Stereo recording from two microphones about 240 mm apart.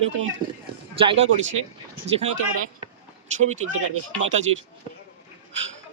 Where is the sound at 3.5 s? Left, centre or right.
Right.